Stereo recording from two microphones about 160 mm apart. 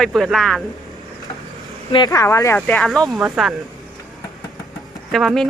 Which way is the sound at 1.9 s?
25° left (ahead or behind).